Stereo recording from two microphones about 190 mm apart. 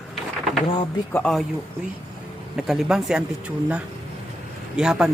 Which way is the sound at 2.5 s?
Centre (ahead or behind).